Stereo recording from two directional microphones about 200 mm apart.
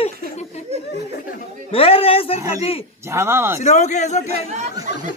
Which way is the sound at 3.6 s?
35° left (ahead or behind).